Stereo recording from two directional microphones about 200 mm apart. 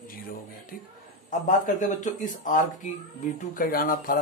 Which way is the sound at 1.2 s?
40° left (ahead or behind).